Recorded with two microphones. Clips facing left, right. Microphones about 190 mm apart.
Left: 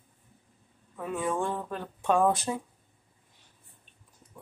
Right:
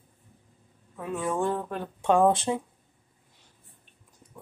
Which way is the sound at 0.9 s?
Centre (ahead or behind).